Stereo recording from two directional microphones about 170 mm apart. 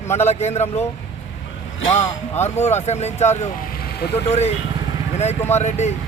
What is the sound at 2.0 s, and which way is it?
Speech, 40° left (ahead or behind).